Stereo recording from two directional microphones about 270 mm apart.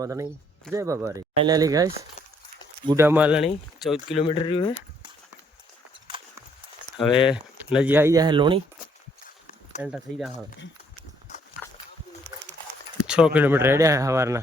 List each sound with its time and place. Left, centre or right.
0.0 s speech: centre
4.2 s speech: centre
7.0 s speech: centre
7.8 s speech: centre
9.8 s speech: centre
13.1 s speech: centre